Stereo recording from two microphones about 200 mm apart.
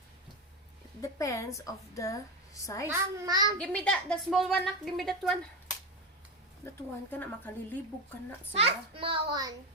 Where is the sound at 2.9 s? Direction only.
15° right (ahead or behind).